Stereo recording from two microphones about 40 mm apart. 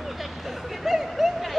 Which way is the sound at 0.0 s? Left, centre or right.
Centre.